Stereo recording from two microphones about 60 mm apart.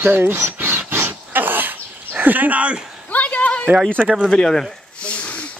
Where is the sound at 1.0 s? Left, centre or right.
Right.